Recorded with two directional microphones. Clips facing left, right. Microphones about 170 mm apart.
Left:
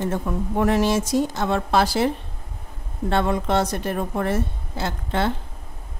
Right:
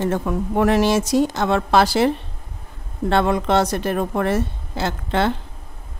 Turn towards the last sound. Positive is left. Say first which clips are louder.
# right 3 dB
turn(degrees=-85)